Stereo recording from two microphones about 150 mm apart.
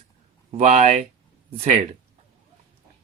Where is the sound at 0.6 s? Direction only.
50° right (ahead or behind).